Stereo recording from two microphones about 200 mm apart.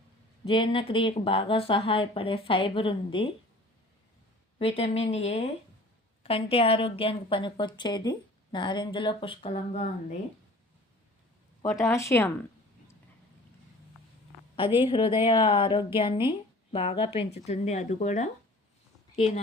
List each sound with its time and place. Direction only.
0.4 s speech: 25° left (ahead or behind)
4.5 s speech: 30° left (ahead or behind)
11.6 s speech: 10° left (ahead or behind)
14.8 s speech: 25° left (ahead or behind)